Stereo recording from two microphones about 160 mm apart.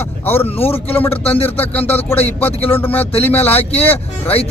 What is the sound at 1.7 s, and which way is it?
Speech, 10° left (ahead or behind).